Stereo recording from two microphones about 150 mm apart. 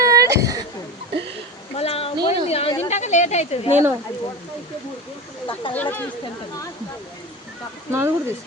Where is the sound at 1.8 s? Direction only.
40° left (ahead or behind).